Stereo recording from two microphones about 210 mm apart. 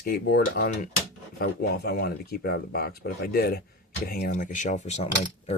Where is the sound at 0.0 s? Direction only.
45° left (ahead or behind).